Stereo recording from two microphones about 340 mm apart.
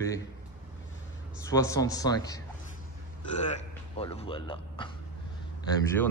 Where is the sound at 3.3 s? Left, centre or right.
Centre.